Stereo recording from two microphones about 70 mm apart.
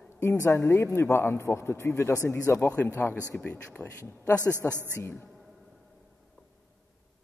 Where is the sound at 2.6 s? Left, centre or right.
Left.